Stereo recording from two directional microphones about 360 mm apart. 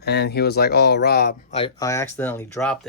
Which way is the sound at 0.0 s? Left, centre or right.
Left.